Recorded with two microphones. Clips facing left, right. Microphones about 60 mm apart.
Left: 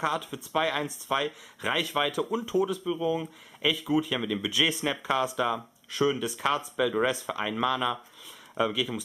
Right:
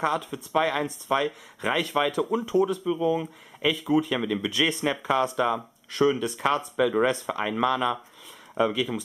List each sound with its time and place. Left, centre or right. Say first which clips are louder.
0.0 s speech: right 3 dB; centre